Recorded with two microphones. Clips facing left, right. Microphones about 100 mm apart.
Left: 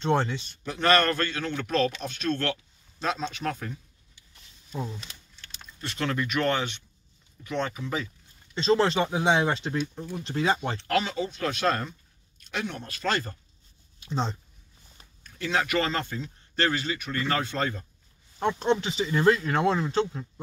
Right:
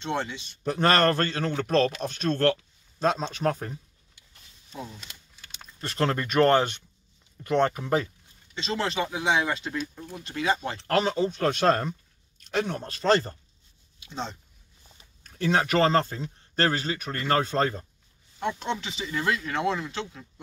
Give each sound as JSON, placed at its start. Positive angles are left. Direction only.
{"t": 0.0, "sound": "speech", "side_deg": 40}
{"t": 0.7, "sound": "speech", "side_deg": -45}
{"t": 5.3, "sound": "typing", "side_deg": -5}
{"t": 5.8, "sound": "speech", "side_deg": -40}
{"t": 8.5, "sound": "speech", "side_deg": 35}
{"t": 10.9, "sound": "speech", "side_deg": -35}
{"t": 13.9, "sound": "speech", "side_deg": 40}
{"t": 15.2, "sound": "speech", "side_deg": -45}
{"t": 18.4, "sound": "speech", "side_deg": 40}